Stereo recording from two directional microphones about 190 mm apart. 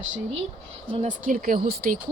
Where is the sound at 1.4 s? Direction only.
50° right (ahead or behind).